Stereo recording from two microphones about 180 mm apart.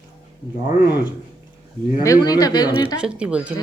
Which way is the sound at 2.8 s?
5° right (ahead or behind).